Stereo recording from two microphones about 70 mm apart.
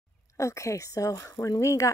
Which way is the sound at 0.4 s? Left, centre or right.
Left.